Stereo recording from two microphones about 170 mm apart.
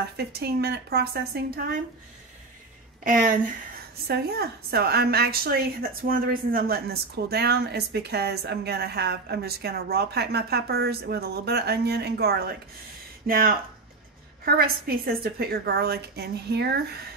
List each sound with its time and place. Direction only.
0.2 s a woman's voice: 70° right (ahead or behind)
3.0 s speech: 55° right (ahead or behind)
4.1 s a woman's voice: 70° right (ahead or behind)